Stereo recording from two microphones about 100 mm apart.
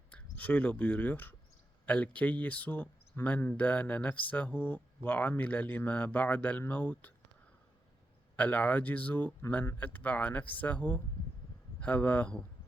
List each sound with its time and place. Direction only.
0.1 s speech: 15° left (ahead or behind)
8.4 s speech: 15° left (ahead or behind)